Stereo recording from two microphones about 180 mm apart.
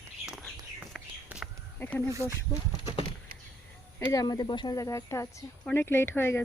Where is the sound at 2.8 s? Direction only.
25° left (ahead or behind).